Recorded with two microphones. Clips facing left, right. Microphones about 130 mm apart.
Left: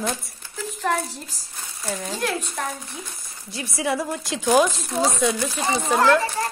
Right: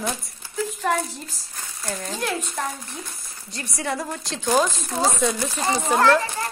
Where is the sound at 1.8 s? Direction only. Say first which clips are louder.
Left 1 dB; 10° left (ahead or behind).